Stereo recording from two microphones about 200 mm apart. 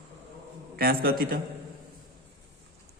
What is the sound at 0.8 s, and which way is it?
Speech, 50° right (ahead or behind).